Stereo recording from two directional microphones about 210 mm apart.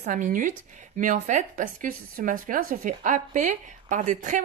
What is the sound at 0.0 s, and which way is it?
Speech, 35° right (ahead or behind).